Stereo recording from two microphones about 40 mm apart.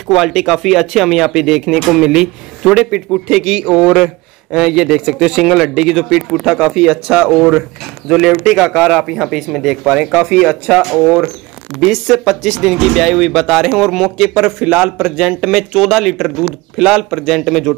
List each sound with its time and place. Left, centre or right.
0.1 s a man's voice: centre
7.2 s a man's voice: centre
9.8 s speech: right
11.8 s speech: centre
14.6 s a man's voice: right
15.1 s speech: right
15.5 s a man's voice: centre
17.5 s speech: centre